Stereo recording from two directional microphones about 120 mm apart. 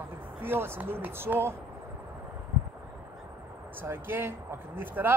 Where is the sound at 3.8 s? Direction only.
15° right (ahead or behind).